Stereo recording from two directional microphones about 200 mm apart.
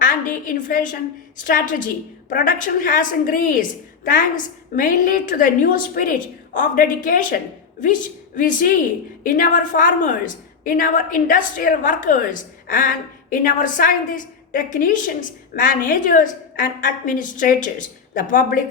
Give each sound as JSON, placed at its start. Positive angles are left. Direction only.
{"t": 0.0, "sound": "a woman's voice", "side_deg": 40}